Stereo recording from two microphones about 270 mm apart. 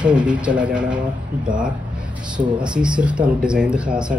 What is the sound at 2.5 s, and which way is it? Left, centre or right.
Speech, centre.